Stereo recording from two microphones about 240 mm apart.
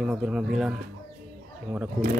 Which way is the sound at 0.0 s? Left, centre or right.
Centre.